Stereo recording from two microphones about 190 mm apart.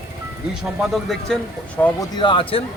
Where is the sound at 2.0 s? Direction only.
25° left (ahead or behind).